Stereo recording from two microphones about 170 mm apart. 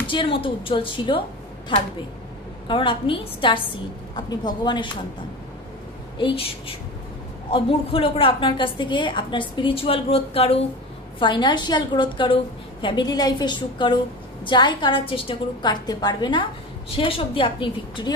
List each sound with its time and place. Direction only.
0.0 s a woman's voice: 30° left (ahead or behind)
6.1 s a woman's voice: 30° left (ahead or behind)
7.5 s a woman's voice: 30° left (ahead or behind)